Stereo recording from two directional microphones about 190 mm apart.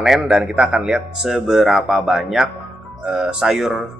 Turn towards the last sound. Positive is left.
turn(degrees=0)  # may be behind; listen again after turning